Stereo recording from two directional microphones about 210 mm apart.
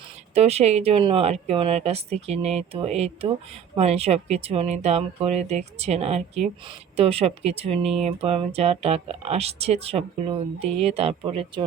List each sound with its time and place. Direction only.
0.3 s speech: 30° right (ahead or behind)